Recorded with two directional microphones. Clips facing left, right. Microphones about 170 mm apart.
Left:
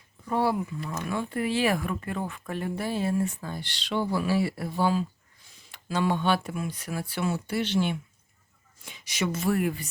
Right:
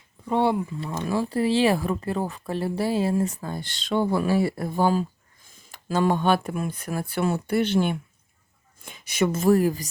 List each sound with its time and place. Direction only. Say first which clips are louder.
0.3 s speech: right 4 dB; 20° right (ahead or behind)